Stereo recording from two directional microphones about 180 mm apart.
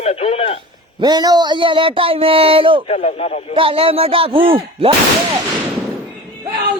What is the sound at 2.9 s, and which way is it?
Speech, 40° left (ahead or behind).